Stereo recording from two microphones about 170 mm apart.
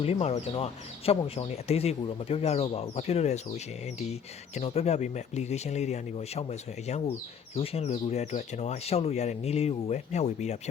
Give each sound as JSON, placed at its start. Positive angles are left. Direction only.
{"t": 0.0, "sound": "speech", "side_deg": 35}